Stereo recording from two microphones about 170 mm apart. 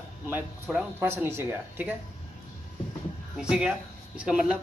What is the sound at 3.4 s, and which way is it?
Speech, 5° right (ahead or behind).